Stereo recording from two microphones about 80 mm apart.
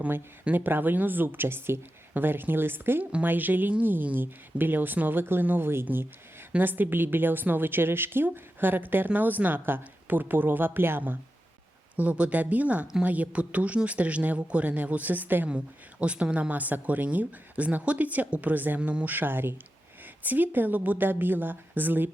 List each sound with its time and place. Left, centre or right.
0.0 s a woman's voice: right